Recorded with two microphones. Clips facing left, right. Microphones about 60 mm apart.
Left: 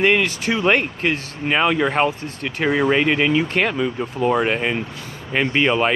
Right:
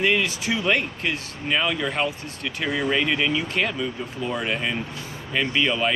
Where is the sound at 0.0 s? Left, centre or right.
Left.